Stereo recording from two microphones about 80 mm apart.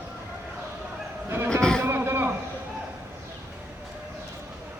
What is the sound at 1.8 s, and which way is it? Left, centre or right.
Vehicle, right.